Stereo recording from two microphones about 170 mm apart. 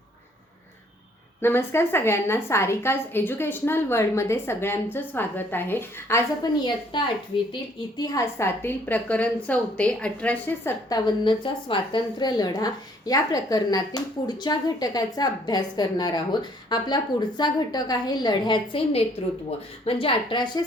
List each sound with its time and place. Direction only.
1.4 s a woman's voice: 15° left (ahead or behind)
6.9 s a woman's voice: 30° left (ahead or behind)